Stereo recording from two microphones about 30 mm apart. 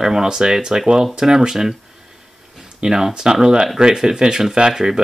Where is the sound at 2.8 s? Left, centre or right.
Right.